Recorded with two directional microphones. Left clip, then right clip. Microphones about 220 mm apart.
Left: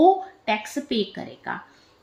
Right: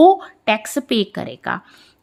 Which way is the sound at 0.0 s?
40° right (ahead or behind).